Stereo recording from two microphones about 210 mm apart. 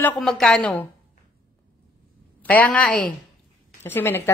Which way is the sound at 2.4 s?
10° left (ahead or behind).